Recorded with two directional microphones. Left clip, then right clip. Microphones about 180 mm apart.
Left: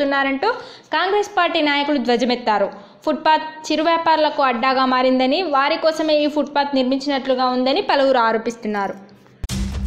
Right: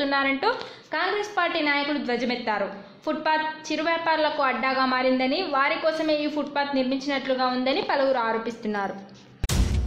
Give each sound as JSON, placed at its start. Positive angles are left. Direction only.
{"t": 0.0, "sound": "a woman's voice", "side_deg": 25}
{"t": 8.6, "sound": "a woman's voice", "side_deg": 15}